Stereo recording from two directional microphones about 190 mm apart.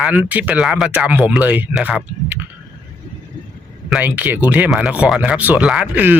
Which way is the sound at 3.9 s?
10° right (ahead or behind).